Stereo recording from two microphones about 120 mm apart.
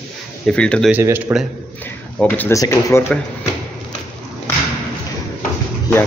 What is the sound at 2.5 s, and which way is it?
Speech, 30° left (ahead or behind).